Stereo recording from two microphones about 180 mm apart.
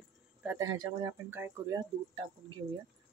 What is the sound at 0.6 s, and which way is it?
Speech, 20° right (ahead or behind).